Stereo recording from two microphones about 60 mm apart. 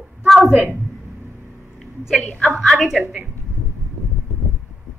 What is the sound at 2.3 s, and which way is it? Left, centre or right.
Speech, centre.